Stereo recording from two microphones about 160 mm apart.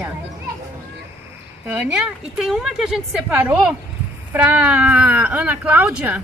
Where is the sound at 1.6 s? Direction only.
5° right (ahead or behind).